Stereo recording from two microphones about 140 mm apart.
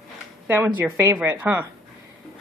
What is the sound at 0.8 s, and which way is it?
Speech, 20° right (ahead or behind).